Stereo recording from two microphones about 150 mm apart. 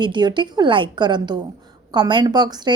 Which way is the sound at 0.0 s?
30° right (ahead or behind).